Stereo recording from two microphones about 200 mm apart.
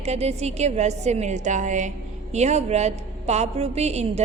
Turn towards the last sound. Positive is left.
turn(degrees=-35)  # may be behind; listen again after turning